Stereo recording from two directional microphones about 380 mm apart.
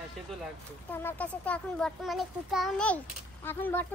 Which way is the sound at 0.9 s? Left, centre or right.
Centre.